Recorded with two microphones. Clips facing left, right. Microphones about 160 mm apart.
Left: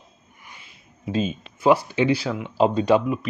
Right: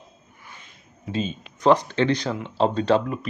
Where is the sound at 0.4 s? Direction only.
10° left (ahead or behind).